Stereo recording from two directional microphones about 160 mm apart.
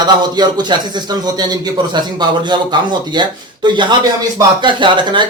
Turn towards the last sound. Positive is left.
turn(degrees=-30)  # may be behind; listen again after turning